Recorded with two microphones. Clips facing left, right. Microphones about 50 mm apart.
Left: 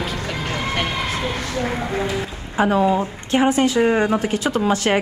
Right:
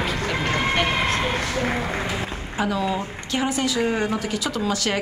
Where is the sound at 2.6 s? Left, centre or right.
Left.